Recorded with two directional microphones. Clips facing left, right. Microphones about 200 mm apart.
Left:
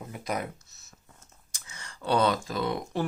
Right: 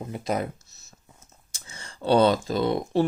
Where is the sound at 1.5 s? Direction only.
30° right (ahead or behind).